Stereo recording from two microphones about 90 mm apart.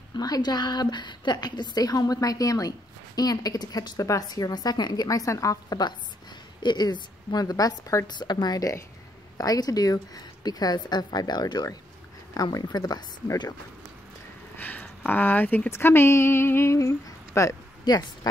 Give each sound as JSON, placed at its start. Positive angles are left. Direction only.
{"t": 0.1, "sound": "a woman's voice", "side_deg": 50}
{"t": 14.6, "sound": "speech", "side_deg": 20}
{"t": 17.8, "sound": "a woman's voice", "side_deg": 50}